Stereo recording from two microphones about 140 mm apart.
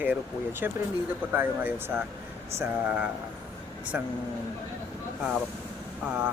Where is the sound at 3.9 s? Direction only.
15° right (ahead or behind).